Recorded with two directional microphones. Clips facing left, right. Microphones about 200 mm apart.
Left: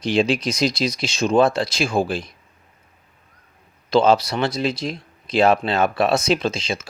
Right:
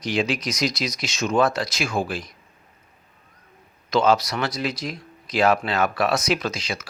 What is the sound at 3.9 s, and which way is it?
Speech, 30° left (ahead or behind).